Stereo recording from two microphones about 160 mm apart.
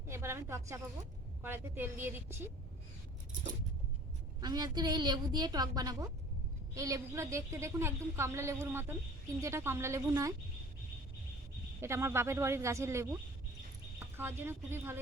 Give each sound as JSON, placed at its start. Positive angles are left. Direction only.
{"t": 0.1, "sound": "a woman's voice", "side_deg": -15}
{"t": 4.4, "sound": "a woman's voice", "side_deg": -25}
{"t": 11.8, "sound": "a woman's voice", "side_deg": -15}
{"t": 14.2, "sound": "a woman's voice", "side_deg": -15}